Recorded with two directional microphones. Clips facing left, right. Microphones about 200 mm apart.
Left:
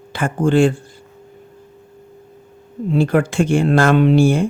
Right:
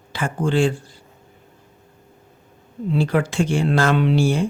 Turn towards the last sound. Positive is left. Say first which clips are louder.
# left 5 dB
turn(degrees=55)  # may be behind; listen again after turning